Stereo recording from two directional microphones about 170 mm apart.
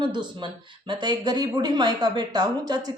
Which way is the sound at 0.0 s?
25° right (ahead or behind).